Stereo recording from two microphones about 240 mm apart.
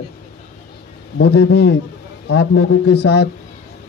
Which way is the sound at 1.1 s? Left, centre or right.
Left.